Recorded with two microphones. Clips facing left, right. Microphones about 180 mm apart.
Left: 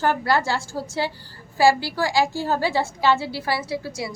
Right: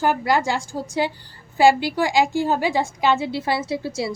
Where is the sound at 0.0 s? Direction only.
15° right (ahead or behind).